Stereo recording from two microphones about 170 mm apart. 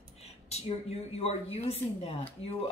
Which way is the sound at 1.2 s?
35° left (ahead or behind).